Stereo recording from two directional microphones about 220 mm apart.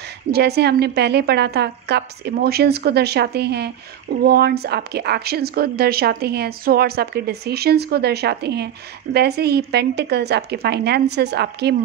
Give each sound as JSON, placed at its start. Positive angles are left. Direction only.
{"t": 0.3, "sound": "speech", "side_deg": -45}